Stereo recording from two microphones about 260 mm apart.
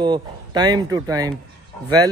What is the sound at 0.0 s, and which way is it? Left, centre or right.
Speech, centre.